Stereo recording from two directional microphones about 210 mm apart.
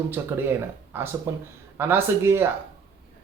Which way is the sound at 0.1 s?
10° right (ahead or behind).